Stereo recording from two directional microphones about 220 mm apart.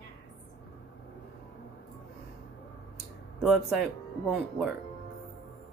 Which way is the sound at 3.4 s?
Centre (ahead or behind).